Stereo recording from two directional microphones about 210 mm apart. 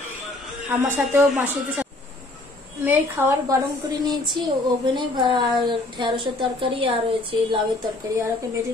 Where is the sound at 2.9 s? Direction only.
10° right (ahead or behind).